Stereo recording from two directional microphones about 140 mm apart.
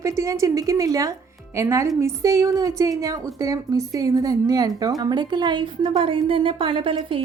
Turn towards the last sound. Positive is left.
turn(degrees=-40)  # may be behind; listen again after turning